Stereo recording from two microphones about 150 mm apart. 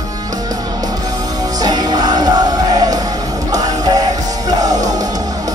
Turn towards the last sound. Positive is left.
turn(degrees=-25)  # may be behind; listen again after turning